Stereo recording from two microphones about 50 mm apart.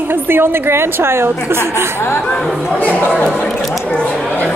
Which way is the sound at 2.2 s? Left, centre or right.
Centre.